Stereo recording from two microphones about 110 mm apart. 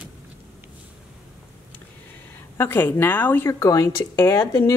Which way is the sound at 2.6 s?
20° left (ahead or behind).